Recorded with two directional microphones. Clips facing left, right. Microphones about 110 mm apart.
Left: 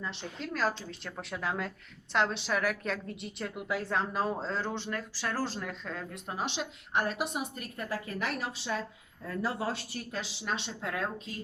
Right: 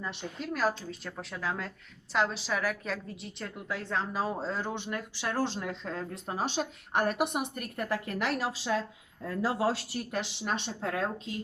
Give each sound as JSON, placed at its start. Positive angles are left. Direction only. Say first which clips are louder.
{"t": 0.0, "sound": "a woman's voice", "louder": "right 1 dB", "side_deg": -15}
{"t": 10.8, "sound": "a woman's voice", "louder": "right 3 dB", "side_deg": -30}